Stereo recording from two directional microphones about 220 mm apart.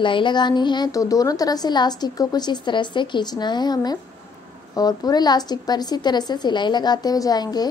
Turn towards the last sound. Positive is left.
turn(degrees=20)  # may be behind; listen again after turning